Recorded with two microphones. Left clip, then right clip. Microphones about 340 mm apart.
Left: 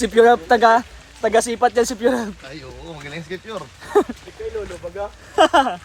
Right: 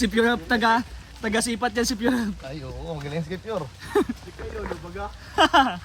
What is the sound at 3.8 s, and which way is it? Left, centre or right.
Speech, centre.